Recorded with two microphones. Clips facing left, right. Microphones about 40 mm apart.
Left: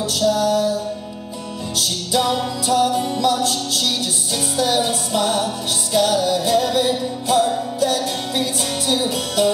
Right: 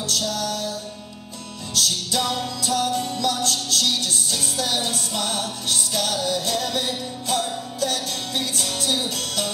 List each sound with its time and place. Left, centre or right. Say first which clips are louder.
0.0 s music: left 8 dB; centre
1.8 s music: left 3 dB; centre